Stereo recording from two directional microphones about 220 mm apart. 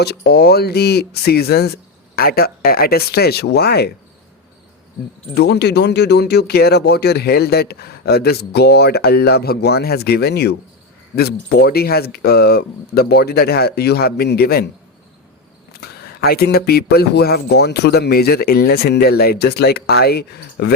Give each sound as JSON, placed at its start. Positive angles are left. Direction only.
{"t": 0.0, "sound": "speech", "side_deg": 45}
{"t": 5.3, "sound": "speech", "side_deg": 50}
{"t": 15.7, "sound": "speech", "side_deg": 45}